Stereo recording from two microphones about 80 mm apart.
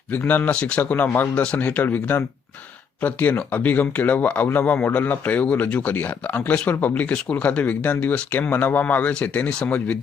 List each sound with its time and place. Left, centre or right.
0.1 s speech: left